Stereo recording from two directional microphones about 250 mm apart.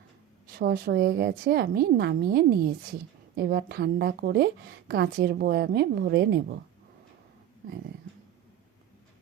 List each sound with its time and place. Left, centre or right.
0.5 s a woman's voice: right